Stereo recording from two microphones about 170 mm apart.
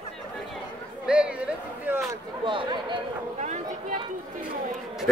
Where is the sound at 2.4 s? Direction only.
30° right (ahead or behind).